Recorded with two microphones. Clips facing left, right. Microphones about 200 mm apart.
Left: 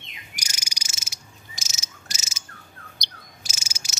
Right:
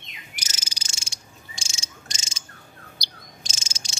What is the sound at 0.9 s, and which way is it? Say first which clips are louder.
Cricket: right 1 dB; 30° right (ahead or behind).